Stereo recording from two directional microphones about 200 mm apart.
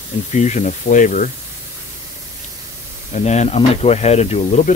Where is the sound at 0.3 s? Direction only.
35° left (ahead or behind).